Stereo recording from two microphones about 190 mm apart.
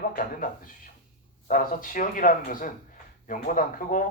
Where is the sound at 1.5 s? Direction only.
45° left (ahead or behind).